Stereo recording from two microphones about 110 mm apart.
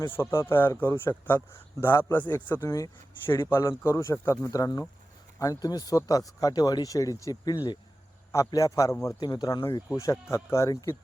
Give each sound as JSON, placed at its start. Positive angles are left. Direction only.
{"t": 0.1, "sound": "speech", "side_deg": 25}
{"t": 9.9, "sound": "speech", "side_deg": 25}